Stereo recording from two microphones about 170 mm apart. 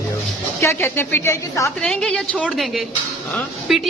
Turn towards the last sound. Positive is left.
turn(degrees=0)  # may be behind; listen again after turning